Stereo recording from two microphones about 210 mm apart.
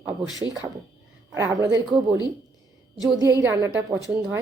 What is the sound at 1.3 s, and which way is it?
Speech, 15° right (ahead or behind).